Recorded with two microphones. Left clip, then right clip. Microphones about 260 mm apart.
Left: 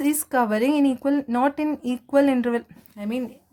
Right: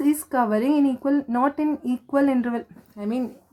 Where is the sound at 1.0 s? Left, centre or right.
Left.